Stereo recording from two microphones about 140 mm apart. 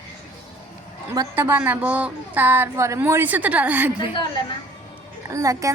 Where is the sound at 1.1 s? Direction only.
20° right (ahead or behind).